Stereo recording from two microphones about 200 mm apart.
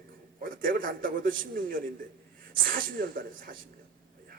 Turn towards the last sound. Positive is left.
turn(degrees=-45)  # may be behind; listen again after turning